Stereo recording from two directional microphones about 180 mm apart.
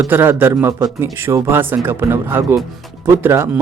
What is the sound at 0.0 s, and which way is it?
Speech, 10° right (ahead or behind).